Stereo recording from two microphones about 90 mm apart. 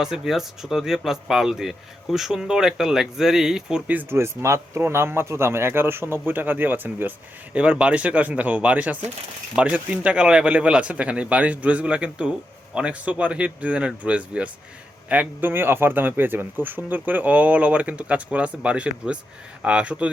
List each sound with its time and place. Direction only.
0.0 s speech: 5° right (ahead or behind)
4.1 s speech: 30° right (ahead or behind); by 20.1 s 15° right (ahead or behind)